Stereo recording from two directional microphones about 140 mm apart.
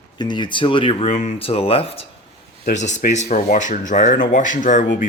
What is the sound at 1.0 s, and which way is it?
Speech, 60° left (ahead or behind).